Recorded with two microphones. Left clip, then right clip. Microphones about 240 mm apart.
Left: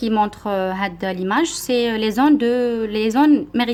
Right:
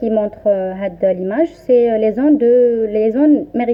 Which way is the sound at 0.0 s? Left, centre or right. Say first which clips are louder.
Right 4 dB; left.